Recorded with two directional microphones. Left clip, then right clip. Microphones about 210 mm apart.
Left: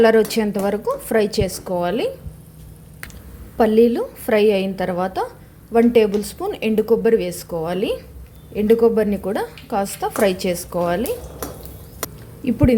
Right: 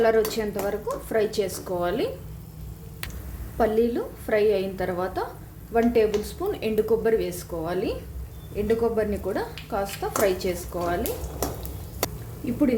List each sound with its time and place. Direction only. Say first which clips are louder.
0.0 s a woman's voice: left 7 dB; 35° left (ahead or behind)
3.6 s a woman's voice: left 8 dB; 35° left (ahead or behind)